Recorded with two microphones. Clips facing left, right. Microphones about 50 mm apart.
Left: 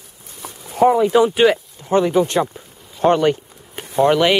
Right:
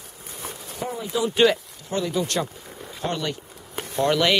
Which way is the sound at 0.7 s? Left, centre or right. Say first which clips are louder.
Left 15 dB; left.